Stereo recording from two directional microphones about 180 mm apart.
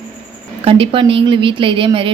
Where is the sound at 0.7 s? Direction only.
30° right (ahead or behind).